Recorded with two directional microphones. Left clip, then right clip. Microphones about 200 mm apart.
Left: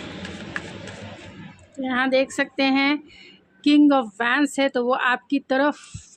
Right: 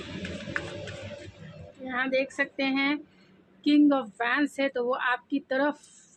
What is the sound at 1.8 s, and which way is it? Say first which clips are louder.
A woman's voice: left 7 dB; 45° left (ahead or behind).